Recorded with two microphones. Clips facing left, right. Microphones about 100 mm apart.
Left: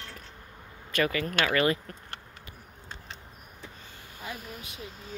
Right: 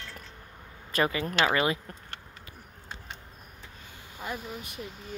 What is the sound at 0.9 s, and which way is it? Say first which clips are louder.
Speech: even; 30° right (ahead or behind).